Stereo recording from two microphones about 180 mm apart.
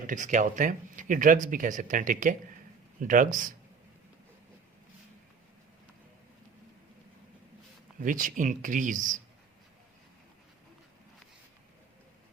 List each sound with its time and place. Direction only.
0.1 s speech: 45° right (ahead or behind)
8.0 s speech: 45° right (ahead or behind)